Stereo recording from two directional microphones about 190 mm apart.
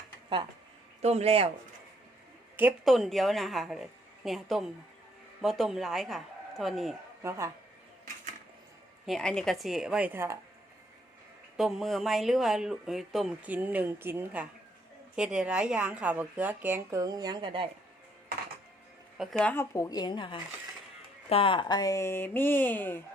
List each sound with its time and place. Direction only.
1.0 s speech: 35° right (ahead or behind)
2.6 s speech: 5° right (ahead or behind)
7.2 s speech: 15° right (ahead or behind)
9.0 s speech: centre (ahead or behind)
11.5 s speech: centre (ahead or behind); by 17.7 s 25° right (ahead or behind)
19.1 s speech: centre (ahead or behind)